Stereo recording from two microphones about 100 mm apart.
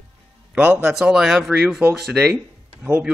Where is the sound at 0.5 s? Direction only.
15° right (ahead or behind).